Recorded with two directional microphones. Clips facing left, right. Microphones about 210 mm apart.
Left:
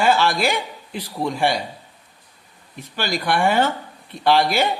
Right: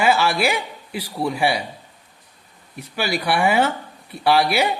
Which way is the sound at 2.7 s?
5° right (ahead or behind).